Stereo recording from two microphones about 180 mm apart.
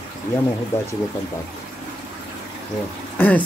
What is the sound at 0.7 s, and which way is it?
Speech, 15° left (ahead or behind).